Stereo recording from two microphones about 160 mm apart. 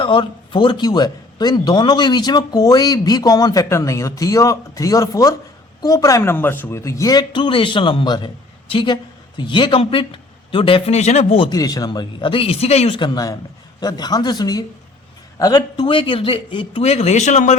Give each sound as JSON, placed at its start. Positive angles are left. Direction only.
{"t": 0.0, "sound": "a man's voice", "side_deg": 30}
{"t": 11.4, "sound": "speech", "side_deg": 25}
{"t": 13.1, "sound": "a man's voice", "side_deg": 20}